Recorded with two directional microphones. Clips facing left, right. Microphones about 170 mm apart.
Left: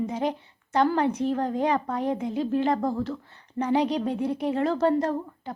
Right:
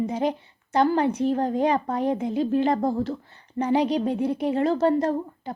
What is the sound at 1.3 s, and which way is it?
A woman's voice, 30° right (ahead or behind).